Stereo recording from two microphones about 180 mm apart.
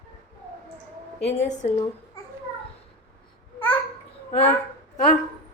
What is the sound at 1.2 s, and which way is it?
Speech, 40° left (ahead or behind).